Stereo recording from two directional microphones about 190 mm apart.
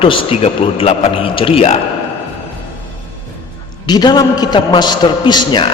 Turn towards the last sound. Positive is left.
turn(degrees=25)  # may be behind; listen again after turning